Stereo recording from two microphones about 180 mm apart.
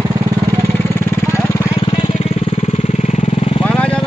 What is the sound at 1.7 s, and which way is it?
Vehicle, 30° left (ahead or behind).